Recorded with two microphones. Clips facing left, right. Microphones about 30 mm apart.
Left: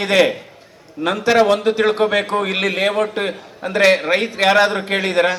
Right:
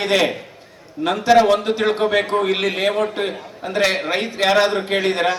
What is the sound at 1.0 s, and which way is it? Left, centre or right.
A man's voice, left.